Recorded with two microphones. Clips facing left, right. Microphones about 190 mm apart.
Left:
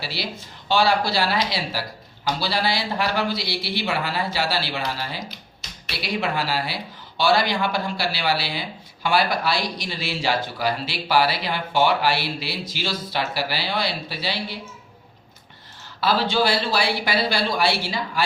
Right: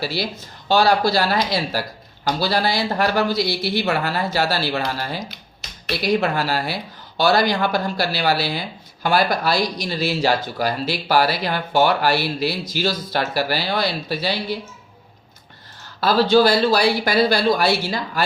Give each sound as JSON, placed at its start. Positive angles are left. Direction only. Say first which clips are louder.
{"t": 0.0, "sound": "speech", "louder": "right 6 dB", "side_deg": -45}
{"t": 16.0, "sound": "speech", "louder": "right 6 dB", "side_deg": -40}